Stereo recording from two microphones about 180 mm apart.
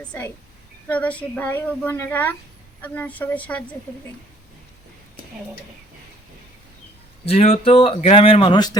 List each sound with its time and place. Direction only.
0.0 s a woman's voice: 10° left (ahead or behind)
7.3 s speech: 35° left (ahead or behind)